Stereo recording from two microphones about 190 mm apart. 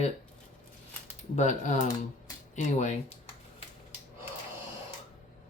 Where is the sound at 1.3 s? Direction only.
40° left (ahead or behind).